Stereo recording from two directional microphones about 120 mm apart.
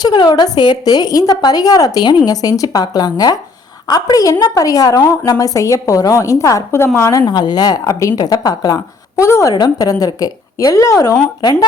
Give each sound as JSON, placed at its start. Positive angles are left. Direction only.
{"t": 0.0, "sound": "a woman's voice", "side_deg": 35}